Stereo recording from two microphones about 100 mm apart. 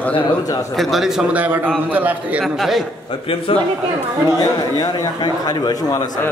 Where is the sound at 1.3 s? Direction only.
15° right (ahead or behind).